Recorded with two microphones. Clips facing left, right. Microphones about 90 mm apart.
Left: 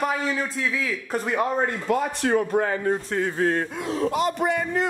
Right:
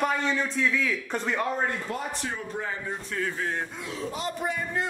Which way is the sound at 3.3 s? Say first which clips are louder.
Left 8 dB; 45° left (ahead or behind).